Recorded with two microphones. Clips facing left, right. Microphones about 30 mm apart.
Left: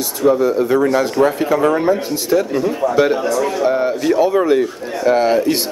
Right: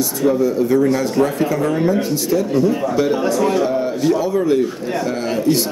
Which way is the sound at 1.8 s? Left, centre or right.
Left.